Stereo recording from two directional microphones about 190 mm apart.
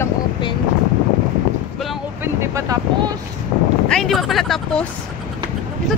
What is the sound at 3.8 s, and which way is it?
Speech, centre (ahead or behind).